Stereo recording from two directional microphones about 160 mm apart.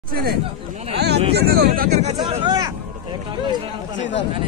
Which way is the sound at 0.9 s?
90° right.